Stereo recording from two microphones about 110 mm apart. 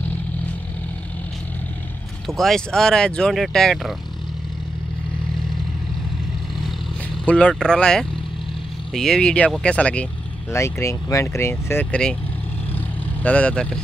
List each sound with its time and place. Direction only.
2.2 s speech: centre (ahead or behind)
7.2 s speech: 10° left (ahead or behind)
10.5 s speech: 25° left (ahead or behind); by 12.2 s 10° left (ahead or behind)
12.7 s vehicle: 15° left (ahead or behind)